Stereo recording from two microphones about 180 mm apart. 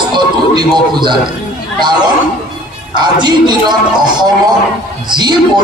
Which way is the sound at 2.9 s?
25° right (ahead or behind).